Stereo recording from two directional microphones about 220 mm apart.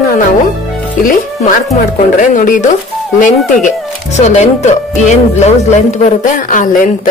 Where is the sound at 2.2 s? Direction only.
35° left (ahead or behind).